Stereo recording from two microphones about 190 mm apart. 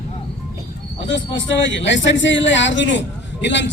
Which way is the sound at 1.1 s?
70° left (ahead or behind).